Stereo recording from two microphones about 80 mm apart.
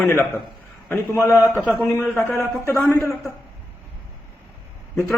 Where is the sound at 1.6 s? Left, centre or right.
Centre.